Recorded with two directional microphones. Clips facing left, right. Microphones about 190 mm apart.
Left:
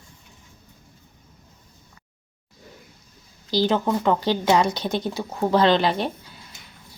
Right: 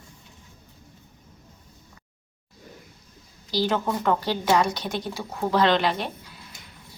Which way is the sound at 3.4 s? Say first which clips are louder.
Left 3 dB; 25° left (ahead or behind).